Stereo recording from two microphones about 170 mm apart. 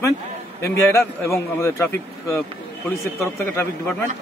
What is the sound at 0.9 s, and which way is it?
Speech, 15° left (ahead or behind).